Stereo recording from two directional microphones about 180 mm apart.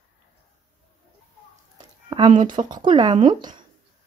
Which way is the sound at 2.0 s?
25° right (ahead or behind).